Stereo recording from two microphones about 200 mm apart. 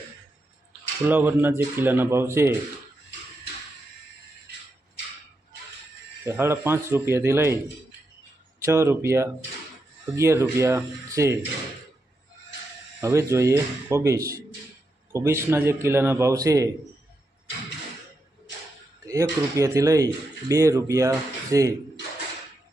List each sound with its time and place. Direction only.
1.0 s a man's voice: 10° right (ahead or behind)
6.2 s a man's voice: 10° right (ahead or behind)
13.0 s a man's voice: 15° right (ahead or behind)
19.0 s a man's voice: 15° right (ahead or behind)